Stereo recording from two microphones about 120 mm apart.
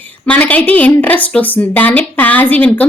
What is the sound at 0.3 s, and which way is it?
Speech, 10° left (ahead or behind).